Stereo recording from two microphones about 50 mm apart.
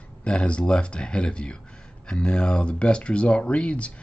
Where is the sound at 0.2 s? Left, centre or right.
Left.